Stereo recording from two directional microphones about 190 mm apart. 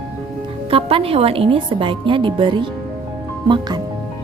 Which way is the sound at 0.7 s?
30° right (ahead or behind).